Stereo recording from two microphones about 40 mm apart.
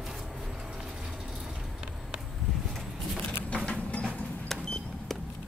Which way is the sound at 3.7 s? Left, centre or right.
Left.